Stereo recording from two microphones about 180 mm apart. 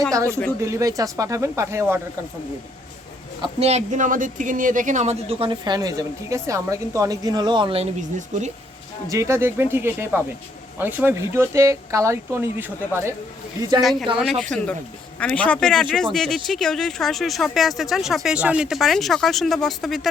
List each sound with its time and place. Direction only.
0.1 s speech: 15° right (ahead or behind)
3.4 s speech: 35° right (ahead or behind)
9.0 s speech: 15° right (ahead or behind)
14.2 s speech: centre (ahead or behind)